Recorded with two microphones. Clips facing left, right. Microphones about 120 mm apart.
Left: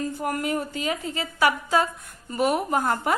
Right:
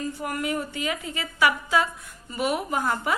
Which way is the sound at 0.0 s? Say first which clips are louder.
Left 2 dB; 40° left (ahead or behind).